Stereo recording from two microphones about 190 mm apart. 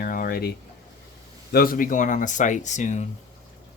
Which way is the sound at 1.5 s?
50° left (ahead or behind).